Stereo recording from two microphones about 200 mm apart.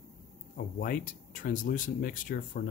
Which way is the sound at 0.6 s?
45° left (ahead or behind).